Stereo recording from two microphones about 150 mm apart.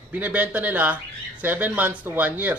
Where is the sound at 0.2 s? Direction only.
10° right (ahead or behind).